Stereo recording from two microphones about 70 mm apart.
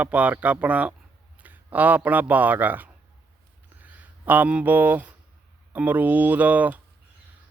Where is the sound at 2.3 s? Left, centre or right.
Right.